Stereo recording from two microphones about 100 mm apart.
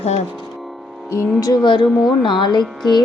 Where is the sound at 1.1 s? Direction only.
40° left (ahead or behind).